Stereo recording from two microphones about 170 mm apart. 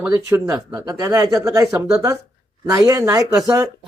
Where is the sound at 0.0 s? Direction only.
15° right (ahead or behind).